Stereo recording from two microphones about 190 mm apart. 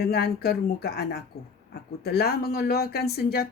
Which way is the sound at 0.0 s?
55° left (ahead or behind).